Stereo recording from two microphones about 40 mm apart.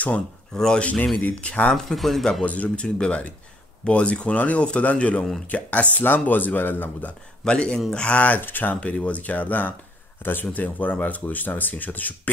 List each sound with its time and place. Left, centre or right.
0.7 s speech: left
1.9 s speech: centre
2.4 s speech: left
6.0 s speech: left
7.4 s speech: left
8.4 s speech: left
8.8 s speech: left